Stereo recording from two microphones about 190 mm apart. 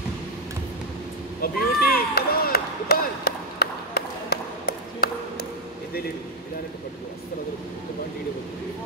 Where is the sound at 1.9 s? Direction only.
55° left (ahead or behind).